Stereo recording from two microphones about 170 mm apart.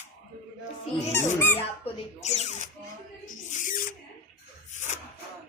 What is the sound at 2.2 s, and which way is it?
Music, 40° left (ahead or behind).